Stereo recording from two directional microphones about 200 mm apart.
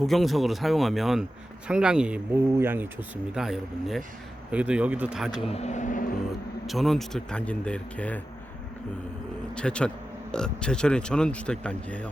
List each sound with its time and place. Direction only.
0.0 s speech: centre (ahead or behind)
5.3 s speech: 30° left (ahead or behind)
6.7 s speech: centre (ahead or behind)
9.6 s speech: 5° left (ahead or behind)